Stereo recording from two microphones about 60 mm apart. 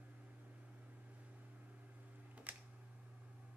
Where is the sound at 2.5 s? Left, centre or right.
Right.